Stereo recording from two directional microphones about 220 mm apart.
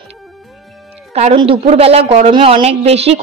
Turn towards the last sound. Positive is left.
turn(degrees=-30)  # may be behind; listen again after turning